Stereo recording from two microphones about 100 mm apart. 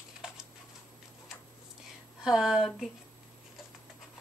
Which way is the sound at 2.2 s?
5° right (ahead or behind).